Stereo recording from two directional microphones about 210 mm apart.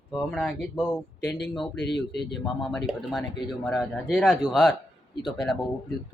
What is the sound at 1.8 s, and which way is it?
Speech, 55° left (ahead or behind).